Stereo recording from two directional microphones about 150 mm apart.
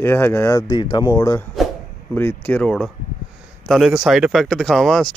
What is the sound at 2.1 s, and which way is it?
Speech, 10° left (ahead or behind).